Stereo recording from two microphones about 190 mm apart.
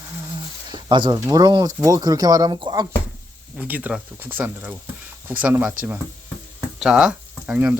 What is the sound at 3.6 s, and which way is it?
Speech, 10° right (ahead or behind).